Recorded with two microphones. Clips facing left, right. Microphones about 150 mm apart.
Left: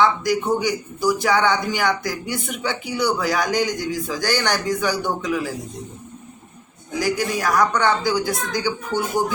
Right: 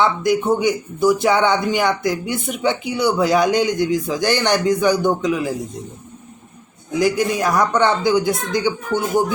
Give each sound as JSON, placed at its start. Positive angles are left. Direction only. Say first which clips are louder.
{"t": 0.0, "sound": "a man's voice", "louder": "right 2 dB", "side_deg": -25}
{"t": 7.0, "sound": "a man's voice", "louder": "right 4 dB", "side_deg": -20}